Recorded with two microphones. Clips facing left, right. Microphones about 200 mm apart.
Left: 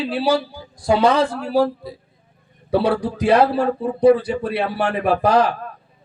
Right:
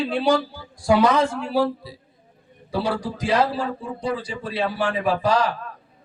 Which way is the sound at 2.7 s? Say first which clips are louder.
Left 6 dB; 60° left (ahead or behind).